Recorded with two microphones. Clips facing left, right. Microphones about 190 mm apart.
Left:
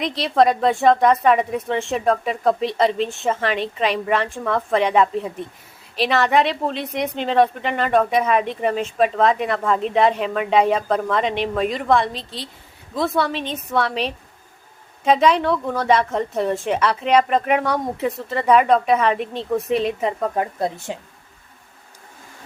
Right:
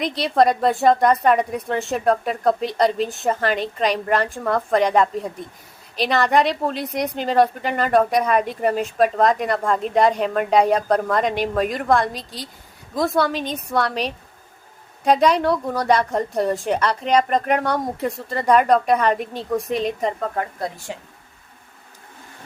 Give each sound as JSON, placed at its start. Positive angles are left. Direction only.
{"t": 0.0, "sound": "a woman's voice", "side_deg": 0}
{"t": 20.3, "sound": "speech", "side_deg": 20}